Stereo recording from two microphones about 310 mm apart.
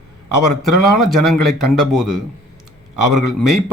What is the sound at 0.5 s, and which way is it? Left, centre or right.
A man's voice, centre.